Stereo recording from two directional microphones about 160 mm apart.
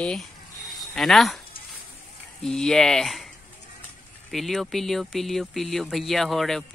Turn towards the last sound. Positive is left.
turn(degrees=0)  # may be behind; listen again after turning